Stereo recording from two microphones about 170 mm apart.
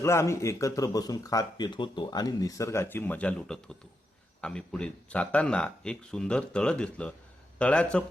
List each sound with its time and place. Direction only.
0.0 s speech: 15° left (ahead or behind)